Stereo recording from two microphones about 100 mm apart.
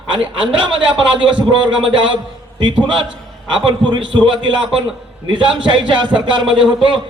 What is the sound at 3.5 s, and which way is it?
A man's voice, 55° right (ahead or behind).